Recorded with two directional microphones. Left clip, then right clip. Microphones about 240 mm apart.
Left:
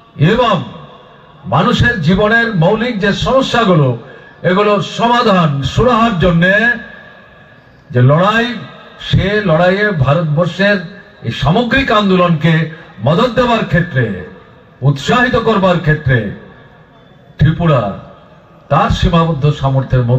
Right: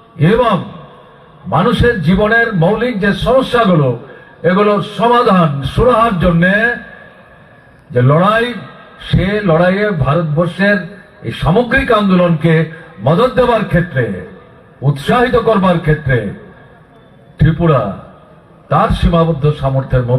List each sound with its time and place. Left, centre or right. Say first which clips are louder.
0.2 s a man's voice: even; left
1.5 s a man's voice: even; left
7.9 s a man's voice: even; left
17.4 s a man's voice: right 1 dB; left